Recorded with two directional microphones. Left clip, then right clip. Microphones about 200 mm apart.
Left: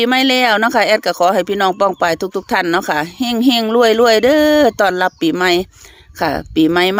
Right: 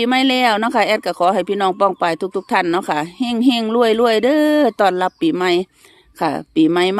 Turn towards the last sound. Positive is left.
turn(degrees=15)  # may be behind; listen again after turning